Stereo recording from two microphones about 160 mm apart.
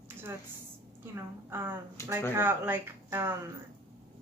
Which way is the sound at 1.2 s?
15° right (ahead or behind).